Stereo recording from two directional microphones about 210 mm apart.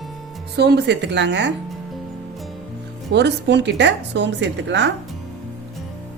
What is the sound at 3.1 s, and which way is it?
A woman's voice, 55° right (ahead or behind).